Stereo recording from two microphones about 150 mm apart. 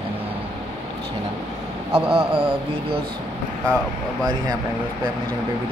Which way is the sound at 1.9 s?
40° right (ahead or behind).